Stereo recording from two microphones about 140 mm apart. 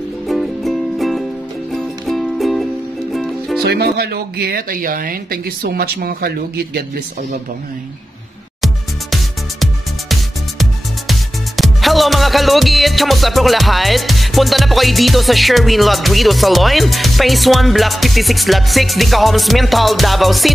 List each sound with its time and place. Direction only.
0.3 s music: centre (ahead or behind)
4.5 s speech: 90° right
8.5 s music: centre (ahead or behind)